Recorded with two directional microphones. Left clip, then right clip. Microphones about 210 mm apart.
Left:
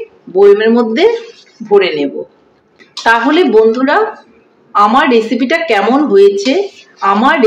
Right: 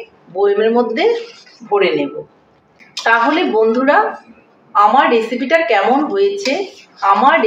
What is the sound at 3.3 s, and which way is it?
A woman's voice, 50° left (ahead or behind).